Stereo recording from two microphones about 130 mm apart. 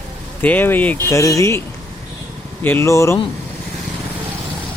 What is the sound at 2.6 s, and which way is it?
Speech, 20° left (ahead or behind).